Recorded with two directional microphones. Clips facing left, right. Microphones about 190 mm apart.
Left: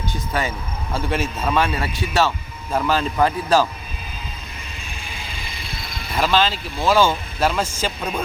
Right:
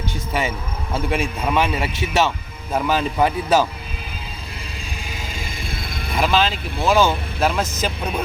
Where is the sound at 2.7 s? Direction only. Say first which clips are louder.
Even; 10° right (ahead or behind).